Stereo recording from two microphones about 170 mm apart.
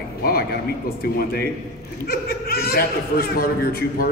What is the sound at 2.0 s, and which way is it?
Speech, 65° left (ahead or behind).